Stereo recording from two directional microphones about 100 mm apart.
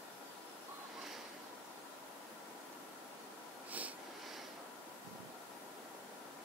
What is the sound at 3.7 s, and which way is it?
Snort, 15° right (ahead or behind).